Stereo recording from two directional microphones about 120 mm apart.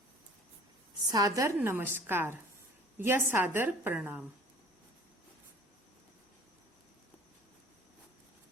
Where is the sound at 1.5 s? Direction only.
15° right (ahead or behind).